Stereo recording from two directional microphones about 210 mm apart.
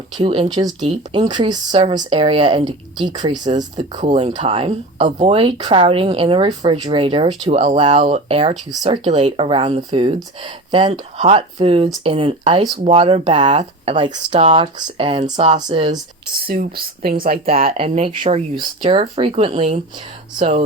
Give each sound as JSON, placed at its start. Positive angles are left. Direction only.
{"t": 0.2, "sound": "speech", "side_deg": -25}
{"t": 16.5, "sound": "speech", "side_deg": -45}
{"t": 17.7, "sound": "speech", "side_deg": -25}